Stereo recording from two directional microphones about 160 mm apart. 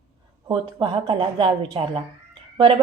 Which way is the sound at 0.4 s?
30° right (ahead or behind).